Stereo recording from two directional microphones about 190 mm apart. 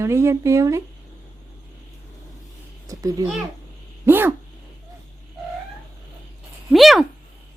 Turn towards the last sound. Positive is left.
turn(degrees=0)  # may be behind; listen again after turning